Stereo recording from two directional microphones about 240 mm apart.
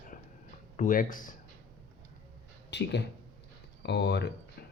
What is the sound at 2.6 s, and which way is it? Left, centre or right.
Speech, left.